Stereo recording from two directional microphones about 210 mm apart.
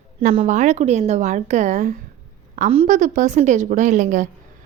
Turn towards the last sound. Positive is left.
turn(degrees=-35)  # may be behind; listen again after turning